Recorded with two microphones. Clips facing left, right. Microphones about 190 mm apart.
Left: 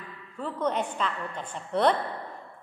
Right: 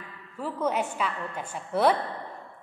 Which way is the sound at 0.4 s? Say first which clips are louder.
Right 1 dB; 5° right (ahead or behind).